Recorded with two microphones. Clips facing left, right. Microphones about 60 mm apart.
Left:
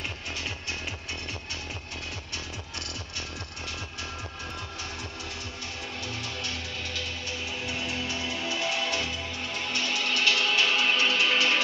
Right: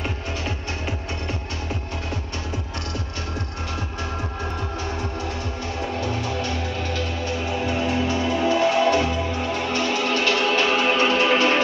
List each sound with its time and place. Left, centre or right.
6.0 s music: centre
7.4 s music: right
8.7 s music: centre
11.3 s music: right